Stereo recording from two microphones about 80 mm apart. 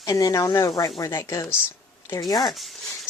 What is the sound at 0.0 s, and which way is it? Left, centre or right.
A woman's voice, left.